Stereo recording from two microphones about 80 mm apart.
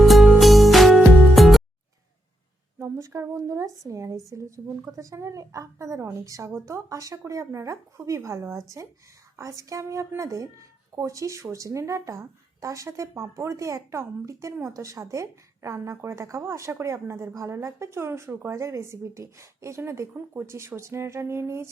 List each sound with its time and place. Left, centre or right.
0.0 s music: centre
2.7 s a woman's voice: right
6.5 s a woman's voice: right
6.8 s a woman's voice: right